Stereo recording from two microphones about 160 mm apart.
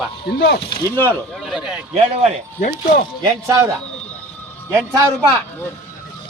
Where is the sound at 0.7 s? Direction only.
20° left (ahead or behind).